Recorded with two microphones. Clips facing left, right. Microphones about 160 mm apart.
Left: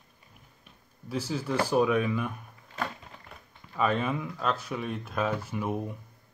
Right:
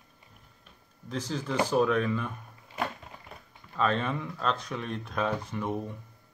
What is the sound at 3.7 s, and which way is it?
Speech, 10° left (ahead or behind).